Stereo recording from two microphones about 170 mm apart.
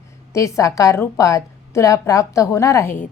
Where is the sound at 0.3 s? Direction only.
20° left (ahead or behind).